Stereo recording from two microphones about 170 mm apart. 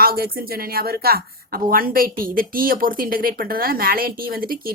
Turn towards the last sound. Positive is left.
turn(degrees=-60)  # may be behind; listen again after turning